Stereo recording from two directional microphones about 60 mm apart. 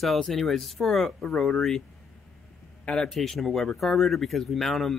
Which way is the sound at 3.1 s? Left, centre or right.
Centre.